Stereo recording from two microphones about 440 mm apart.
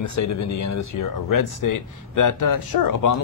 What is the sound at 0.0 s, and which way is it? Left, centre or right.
Speech, left.